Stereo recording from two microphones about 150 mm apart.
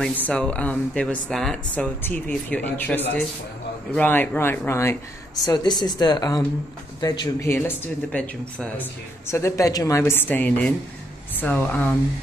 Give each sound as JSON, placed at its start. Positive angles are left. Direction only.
{"t": 0.0, "sound": "a woman's voice", "side_deg": 10}